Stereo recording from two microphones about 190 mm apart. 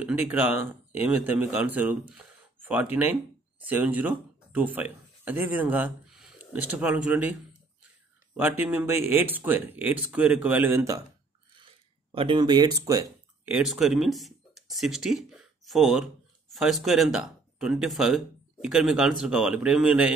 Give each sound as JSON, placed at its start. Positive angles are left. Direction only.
{"t": 0.0, "sound": "speech", "side_deg": -5}
{"t": 8.4, "sound": "speech", "side_deg": -10}
{"t": 11.5, "sound": "a sound", "side_deg": -30}
{"t": 13.6, "sound": "speech", "side_deg": 0}